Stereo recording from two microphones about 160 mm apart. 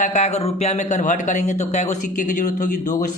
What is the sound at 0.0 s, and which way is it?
Speech, 50° left (ahead or behind).